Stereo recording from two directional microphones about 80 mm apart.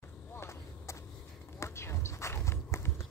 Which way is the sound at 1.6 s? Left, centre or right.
Left.